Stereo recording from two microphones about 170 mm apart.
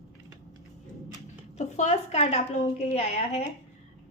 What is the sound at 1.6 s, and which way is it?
A woman's voice, 40° left (ahead or behind).